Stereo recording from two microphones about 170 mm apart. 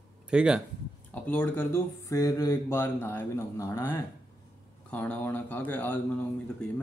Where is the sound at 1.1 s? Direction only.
10° left (ahead or behind).